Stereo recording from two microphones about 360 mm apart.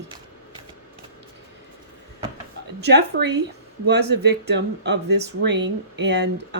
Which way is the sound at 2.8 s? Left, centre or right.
Right.